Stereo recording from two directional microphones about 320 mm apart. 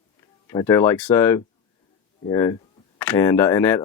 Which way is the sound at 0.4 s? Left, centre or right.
Centre.